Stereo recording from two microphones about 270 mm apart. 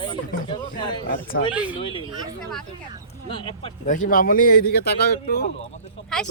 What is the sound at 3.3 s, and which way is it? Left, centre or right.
Speech, centre.